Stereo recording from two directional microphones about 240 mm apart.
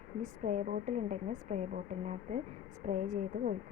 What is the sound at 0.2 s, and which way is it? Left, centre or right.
A woman's voice, right.